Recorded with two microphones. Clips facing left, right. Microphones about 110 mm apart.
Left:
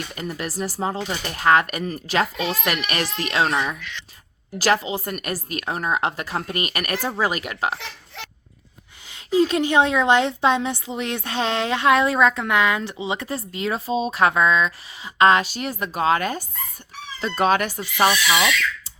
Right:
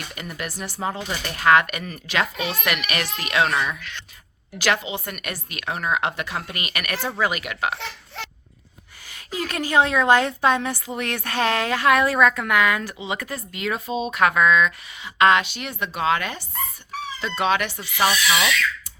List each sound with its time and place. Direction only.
0.2 s speech: 35° left (ahead or behind)
9.0 s a woman's voice: 20° left (ahead or behind); by 18.1 s 40° left (ahead or behind)
18.1 s speech: centre (ahead or behind)